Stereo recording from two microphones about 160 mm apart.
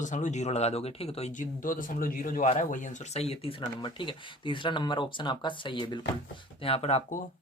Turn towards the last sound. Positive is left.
turn(degrees=40)  # may be behind; listen again after turning